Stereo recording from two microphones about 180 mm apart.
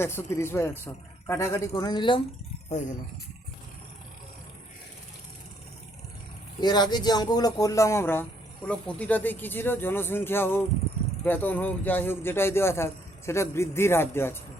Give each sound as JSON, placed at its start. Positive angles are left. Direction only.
{"t": 0.0, "sound": "speech", "side_deg": 15}
{"t": 6.6, "sound": "speech", "side_deg": 25}